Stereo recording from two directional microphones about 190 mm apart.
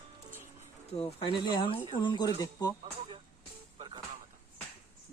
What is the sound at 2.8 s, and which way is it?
Speech, 30° right (ahead or behind).